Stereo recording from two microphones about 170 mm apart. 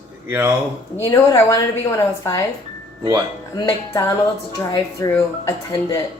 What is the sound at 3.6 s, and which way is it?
A woman's voice, 20° left (ahead or behind).